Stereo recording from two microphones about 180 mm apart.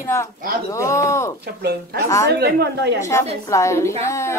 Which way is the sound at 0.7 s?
15° left (ahead or behind).